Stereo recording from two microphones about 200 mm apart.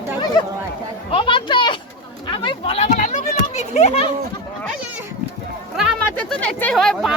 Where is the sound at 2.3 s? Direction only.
25° left (ahead or behind).